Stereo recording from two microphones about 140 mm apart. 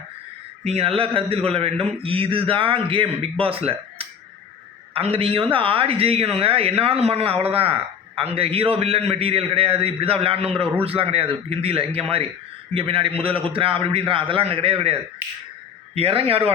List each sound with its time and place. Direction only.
0.6 s a man's voice: 45° right (ahead or behind)
16.0 s speech: 45° right (ahead or behind)